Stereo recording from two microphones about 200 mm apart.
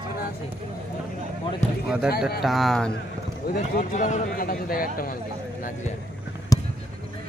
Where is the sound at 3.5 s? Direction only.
40° left (ahead or behind).